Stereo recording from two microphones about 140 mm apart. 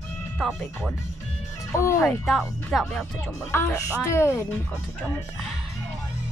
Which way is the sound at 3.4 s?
15° left (ahead or behind).